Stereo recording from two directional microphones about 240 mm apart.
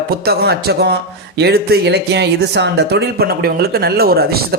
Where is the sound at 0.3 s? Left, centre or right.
Right.